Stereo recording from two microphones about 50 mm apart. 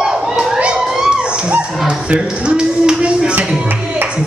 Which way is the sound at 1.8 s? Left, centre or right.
Right.